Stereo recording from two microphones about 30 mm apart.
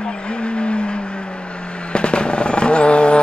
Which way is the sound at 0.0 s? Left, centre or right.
Left.